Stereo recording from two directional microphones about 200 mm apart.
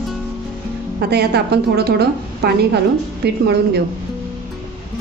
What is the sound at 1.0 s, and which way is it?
A woman's voice, 55° right (ahead or behind).